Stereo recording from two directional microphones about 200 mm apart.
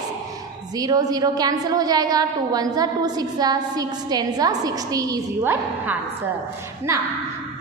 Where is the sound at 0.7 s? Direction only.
20° right (ahead or behind).